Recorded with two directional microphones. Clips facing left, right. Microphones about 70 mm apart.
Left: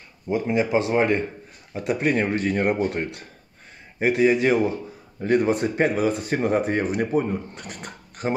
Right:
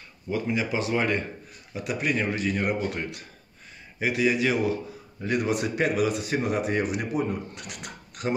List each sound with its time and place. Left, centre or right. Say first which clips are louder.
0.3 s speech: left 6 dB; left